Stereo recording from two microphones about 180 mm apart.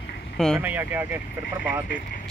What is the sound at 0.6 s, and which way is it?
Speech, 10° right (ahead or behind).